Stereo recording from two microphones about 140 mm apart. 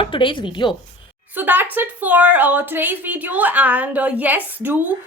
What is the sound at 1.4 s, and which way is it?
A woman's voice, 15° right (ahead or behind).